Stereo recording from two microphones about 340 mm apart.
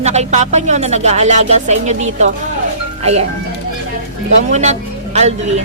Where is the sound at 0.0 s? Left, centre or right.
Centre.